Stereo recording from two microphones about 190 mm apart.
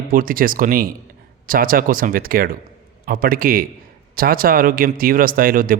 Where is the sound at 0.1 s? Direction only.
45° right (ahead or behind).